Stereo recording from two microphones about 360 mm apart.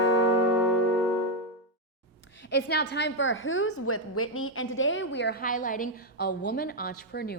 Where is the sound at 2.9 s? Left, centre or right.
Left.